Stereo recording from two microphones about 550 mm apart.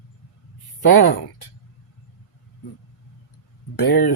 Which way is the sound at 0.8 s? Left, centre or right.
Left.